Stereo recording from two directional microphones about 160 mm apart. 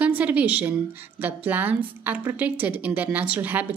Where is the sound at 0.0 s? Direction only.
10° right (ahead or behind).